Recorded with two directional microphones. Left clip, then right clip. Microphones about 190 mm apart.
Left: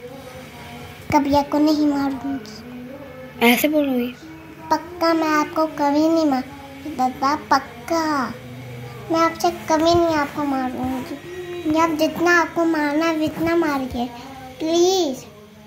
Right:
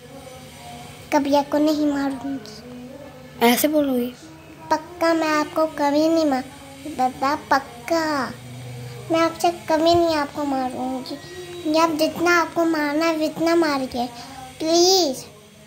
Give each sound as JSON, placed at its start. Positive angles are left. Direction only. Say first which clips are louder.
{"t": 1.0, "sound": "a child's voice", "louder": "left 1 dB", "side_deg": -20}
{"t": 3.3, "sound": "a woman's voice", "louder": "left 1 dB", "side_deg": -30}
{"t": 4.6, "sound": "a child's voice", "louder": "left 1 dB", "side_deg": -20}
{"t": 12.2, "sound": "a child's voice", "louder": "left 2 dB", "side_deg": -10}